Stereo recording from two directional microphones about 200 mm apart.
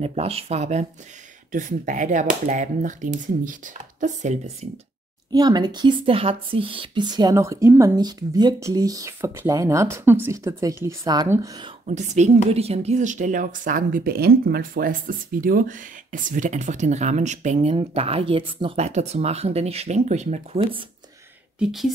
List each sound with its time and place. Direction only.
0.0 s speech: 30° right (ahead or behind)
5.3 s speech: 20° right (ahead or behind)
11.8 s speech: 35° right (ahead or behind)
21.5 s speech: centre (ahead or behind)